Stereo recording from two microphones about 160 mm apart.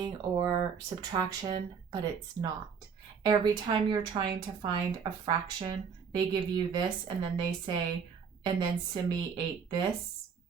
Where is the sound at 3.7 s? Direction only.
25° right (ahead or behind).